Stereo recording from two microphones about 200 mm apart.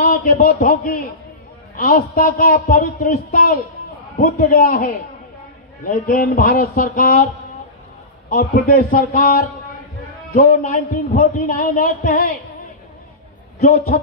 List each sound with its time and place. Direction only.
0.0 s a man's voice: 50° left (ahead or behind)
8.3 s a man's voice: 45° left (ahead or behind)
13.6 s a man's voice: 50° left (ahead or behind)